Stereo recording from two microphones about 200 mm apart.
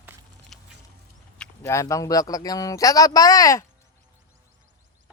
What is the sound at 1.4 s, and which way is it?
Speech, 15° left (ahead or behind).